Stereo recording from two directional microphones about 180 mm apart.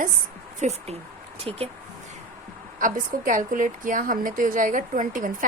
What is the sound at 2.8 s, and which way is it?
A woman's voice, 50° right (ahead or behind).